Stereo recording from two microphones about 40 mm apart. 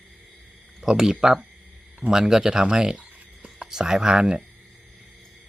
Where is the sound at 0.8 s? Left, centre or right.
Centre.